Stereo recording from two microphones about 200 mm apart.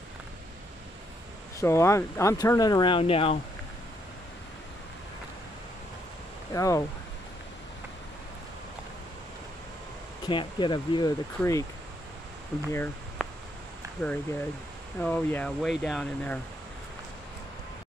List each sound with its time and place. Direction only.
1.6 s speech: 15° left (ahead or behind)
6.5 s speech: 15° left (ahead or behind)
10.2 s speech: 25° left (ahead or behind)
12.7 s a sound: 10° left (ahead or behind)
14.0 s speech: 10° left (ahead or behind)